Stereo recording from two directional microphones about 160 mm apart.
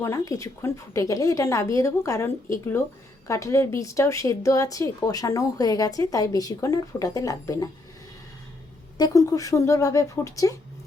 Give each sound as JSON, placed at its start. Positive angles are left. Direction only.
{"t": 0.0, "sound": "a woman's voice", "side_deg": 20}
{"t": 9.0, "sound": "a woman's voice", "side_deg": 25}